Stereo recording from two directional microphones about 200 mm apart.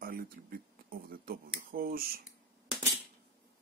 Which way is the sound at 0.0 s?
45° right (ahead or behind).